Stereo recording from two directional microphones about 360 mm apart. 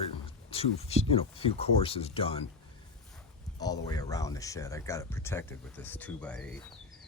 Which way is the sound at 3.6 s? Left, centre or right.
Centre.